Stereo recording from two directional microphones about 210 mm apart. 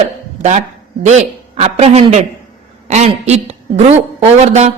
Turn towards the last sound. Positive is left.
turn(degrees=-30)  # may be behind; listen again after turning